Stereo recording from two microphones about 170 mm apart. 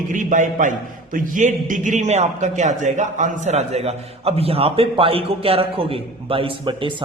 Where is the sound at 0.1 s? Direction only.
50° right (ahead or behind).